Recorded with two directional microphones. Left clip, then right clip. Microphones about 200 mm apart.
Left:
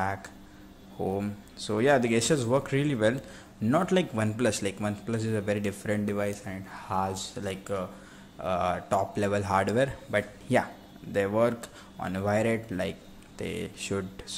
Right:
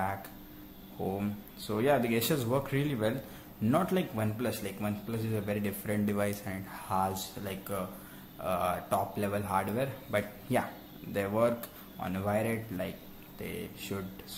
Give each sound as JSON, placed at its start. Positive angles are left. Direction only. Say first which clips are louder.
{"t": 1.0, "sound": "a man's voice", "louder": "left 4 dB", "side_deg": 10}